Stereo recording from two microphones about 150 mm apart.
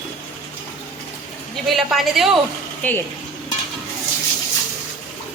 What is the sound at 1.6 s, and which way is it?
Speech, centre (ahead or behind).